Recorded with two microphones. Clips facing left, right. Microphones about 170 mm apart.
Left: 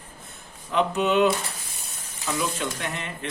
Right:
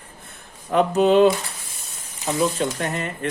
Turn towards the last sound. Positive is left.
turn(degrees=-45)  # may be behind; listen again after turning